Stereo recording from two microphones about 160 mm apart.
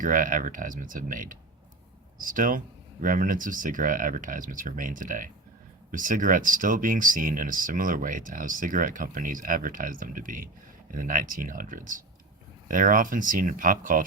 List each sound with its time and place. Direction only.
0.0 s speech: 55° right (ahead or behind)